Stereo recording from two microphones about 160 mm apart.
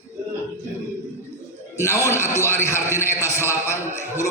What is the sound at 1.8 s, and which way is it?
A man's voice, 15° left (ahead or behind).